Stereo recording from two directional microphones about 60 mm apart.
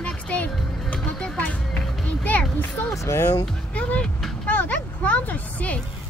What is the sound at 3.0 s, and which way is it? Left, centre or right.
Speech, left.